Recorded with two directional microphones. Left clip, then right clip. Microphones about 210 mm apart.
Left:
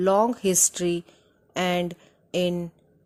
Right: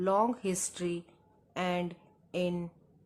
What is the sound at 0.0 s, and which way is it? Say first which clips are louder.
Speech: left 8 dB; 30° left (ahead or behind).